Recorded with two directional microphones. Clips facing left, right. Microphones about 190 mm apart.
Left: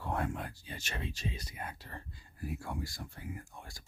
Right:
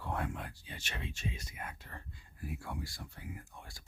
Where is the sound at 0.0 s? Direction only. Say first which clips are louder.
Left 3 dB; 45° left (ahead or behind).